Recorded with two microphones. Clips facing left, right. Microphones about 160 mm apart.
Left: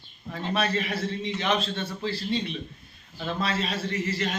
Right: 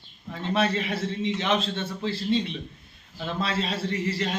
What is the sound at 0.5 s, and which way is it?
A man's voice, 25° right (ahead or behind).